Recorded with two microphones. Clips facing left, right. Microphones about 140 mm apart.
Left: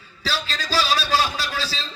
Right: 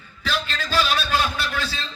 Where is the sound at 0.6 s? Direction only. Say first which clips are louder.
Left 1 dB; 35° left (ahead or behind).